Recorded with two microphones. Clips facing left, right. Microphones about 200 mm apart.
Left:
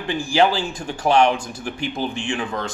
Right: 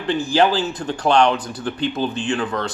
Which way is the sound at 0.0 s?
10° left (ahead or behind).